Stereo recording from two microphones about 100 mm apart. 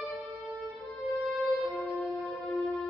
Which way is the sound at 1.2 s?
Centre (ahead or behind).